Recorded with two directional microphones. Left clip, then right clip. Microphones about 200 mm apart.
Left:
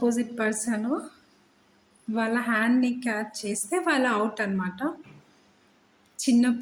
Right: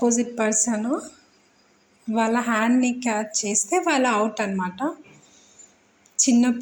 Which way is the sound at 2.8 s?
25° left (ahead or behind).